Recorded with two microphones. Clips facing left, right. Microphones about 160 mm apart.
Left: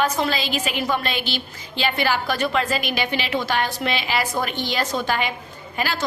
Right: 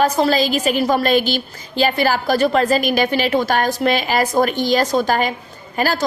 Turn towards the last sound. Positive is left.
turn(degrees=-40)  # may be behind; listen again after turning